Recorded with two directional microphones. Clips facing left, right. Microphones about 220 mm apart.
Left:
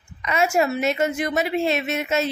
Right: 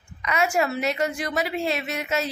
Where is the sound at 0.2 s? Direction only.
25° left (ahead or behind).